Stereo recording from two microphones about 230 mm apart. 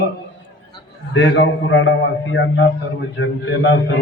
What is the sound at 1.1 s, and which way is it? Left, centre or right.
A man's voice, left.